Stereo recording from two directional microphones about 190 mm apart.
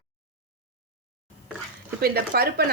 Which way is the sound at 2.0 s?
55° right (ahead or behind).